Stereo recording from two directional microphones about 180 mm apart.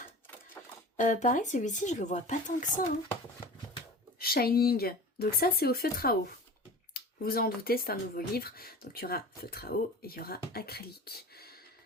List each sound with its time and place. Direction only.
0.6 s a sound: 15° left (ahead or behind)
0.9 s speech: 45° left (ahead or behind)
4.2 s speech: 55° left (ahead or behind)